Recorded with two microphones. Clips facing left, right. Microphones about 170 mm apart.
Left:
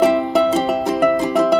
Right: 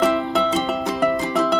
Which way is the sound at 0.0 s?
15° left (ahead or behind).